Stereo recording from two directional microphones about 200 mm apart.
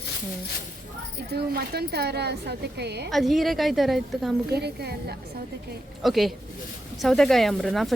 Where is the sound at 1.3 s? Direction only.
50° right (ahead or behind).